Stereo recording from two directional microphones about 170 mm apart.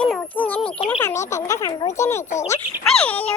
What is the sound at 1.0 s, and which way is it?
Speech, 15° left (ahead or behind).